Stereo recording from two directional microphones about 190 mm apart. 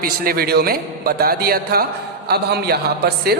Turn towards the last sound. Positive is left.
turn(degrees=-55)  # may be behind; listen again after turning